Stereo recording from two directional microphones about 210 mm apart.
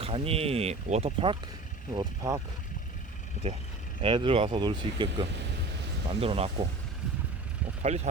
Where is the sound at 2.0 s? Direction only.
15° right (ahead or behind).